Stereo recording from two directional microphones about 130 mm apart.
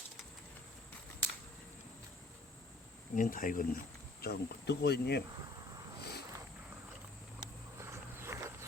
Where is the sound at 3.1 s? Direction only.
90° left.